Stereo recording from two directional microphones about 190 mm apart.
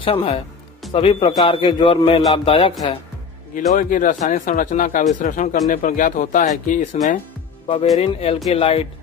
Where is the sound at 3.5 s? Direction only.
45° left (ahead or behind).